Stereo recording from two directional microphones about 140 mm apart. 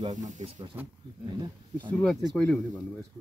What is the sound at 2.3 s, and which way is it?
Speech, 5° left (ahead or behind).